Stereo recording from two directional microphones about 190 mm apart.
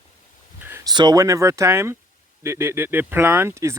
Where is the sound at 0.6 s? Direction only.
10° right (ahead or behind).